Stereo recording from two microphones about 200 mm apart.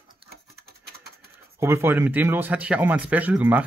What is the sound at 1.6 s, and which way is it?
Speech, 10° right (ahead or behind).